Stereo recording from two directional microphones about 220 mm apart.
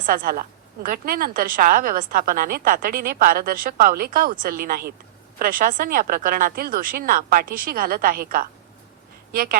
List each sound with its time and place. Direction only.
0.0 s a woman's voice: 40° right (ahead or behind)